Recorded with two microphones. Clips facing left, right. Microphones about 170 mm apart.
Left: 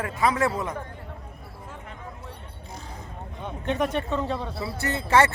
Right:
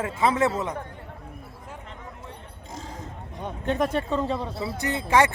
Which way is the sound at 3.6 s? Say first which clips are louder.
Right 1 dB; 40° right (ahead or behind).